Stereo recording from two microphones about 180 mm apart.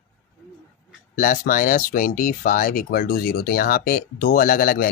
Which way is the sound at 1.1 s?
50° left (ahead or behind).